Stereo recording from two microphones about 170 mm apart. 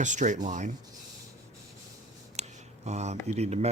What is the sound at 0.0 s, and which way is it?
Speech, 45° right (ahead or behind).